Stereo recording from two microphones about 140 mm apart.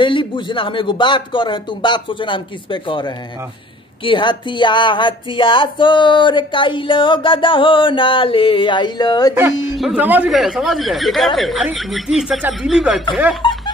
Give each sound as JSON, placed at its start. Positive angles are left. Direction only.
{"t": 0.0, "sound": "speech", "side_deg": 35}
{"t": 9.9, "sound": "speech", "side_deg": -10}
{"t": 10.3, "sound": "speech", "side_deg": 0}